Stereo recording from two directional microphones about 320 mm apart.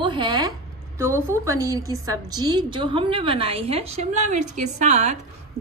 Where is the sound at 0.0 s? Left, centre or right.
Centre.